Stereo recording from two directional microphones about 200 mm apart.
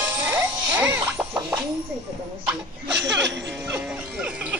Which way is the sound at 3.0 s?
60° right (ahead or behind).